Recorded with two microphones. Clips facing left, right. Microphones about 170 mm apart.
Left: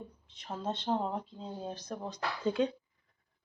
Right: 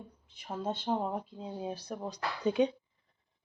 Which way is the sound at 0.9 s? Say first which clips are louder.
Even; 5° right (ahead or behind).